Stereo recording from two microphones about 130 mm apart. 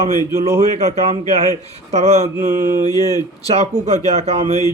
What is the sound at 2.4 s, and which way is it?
Mantra, 90° right.